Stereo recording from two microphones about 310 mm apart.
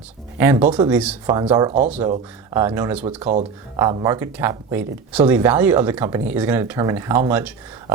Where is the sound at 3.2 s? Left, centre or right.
Right.